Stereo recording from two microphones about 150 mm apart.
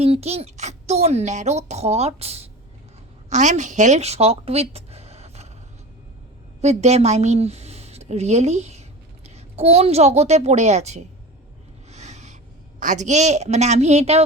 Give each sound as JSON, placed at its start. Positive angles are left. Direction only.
{"t": 0.0, "sound": "a woman's voice", "side_deg": -45}
{"t": 6.6, "sound": "a woman's voice", "side_deg": -50}
{"t": 11.9, "sound": "a sound", "side_deg": -50}
{"t": 12.8, "sound": "a woman's voice", "side_deg": -55}